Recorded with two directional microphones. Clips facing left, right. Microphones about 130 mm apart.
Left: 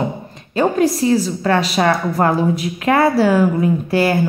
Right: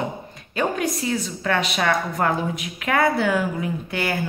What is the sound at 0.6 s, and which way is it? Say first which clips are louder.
A woman's voice: left 8 dB; 30° left (ahead or behind).